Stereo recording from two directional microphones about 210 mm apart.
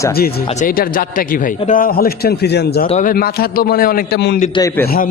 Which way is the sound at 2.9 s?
35° left (ahead or behind).